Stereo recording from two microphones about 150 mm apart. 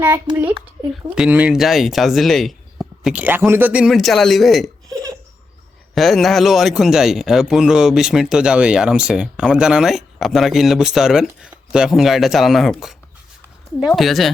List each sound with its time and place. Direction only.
1.1 s a man's voice: 5° right (ahead or behind)
5.9 s a man's voice: centre (ahead or behind)